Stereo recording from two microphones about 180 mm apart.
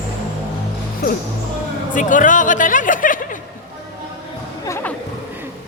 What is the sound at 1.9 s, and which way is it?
Speech, 45° left (ahead or behind).